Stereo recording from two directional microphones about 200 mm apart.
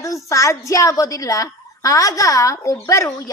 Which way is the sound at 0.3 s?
15° left (ahead or behind).